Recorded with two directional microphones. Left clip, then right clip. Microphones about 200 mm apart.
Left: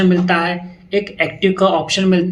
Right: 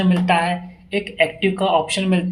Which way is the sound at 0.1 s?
35° right (ahead or behind).